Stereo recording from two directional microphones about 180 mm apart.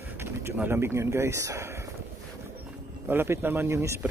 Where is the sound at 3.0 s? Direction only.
15° right (ahead or behind).